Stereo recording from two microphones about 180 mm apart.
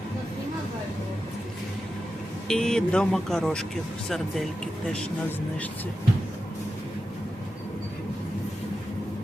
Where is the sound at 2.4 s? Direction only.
5° left (ahead or behind).